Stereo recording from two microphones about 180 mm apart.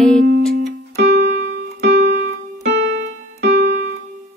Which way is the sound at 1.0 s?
70° right (ahead or behind).